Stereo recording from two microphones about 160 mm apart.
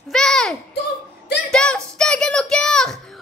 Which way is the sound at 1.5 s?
5° left (ahead or behind).